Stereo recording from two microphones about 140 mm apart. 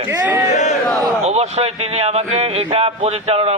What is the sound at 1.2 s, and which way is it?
A man's voice, 50° right (ahead or behind).